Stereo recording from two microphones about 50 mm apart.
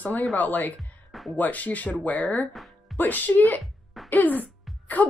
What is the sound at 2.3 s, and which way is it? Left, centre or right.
Music, centre.